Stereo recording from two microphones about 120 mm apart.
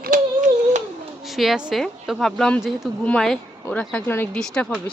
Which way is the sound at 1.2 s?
Centre (ahead or behind).